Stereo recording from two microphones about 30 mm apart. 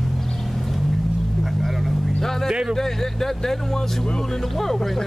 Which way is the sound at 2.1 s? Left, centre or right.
Centre.